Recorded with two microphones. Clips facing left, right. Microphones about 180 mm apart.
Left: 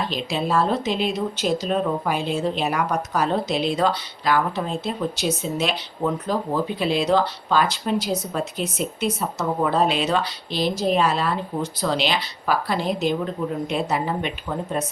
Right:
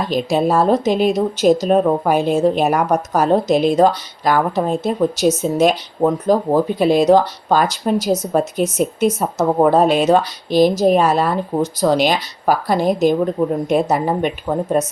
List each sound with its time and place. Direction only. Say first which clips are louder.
0.0 s speech: right 8 dB; 45° right (ahead or behind)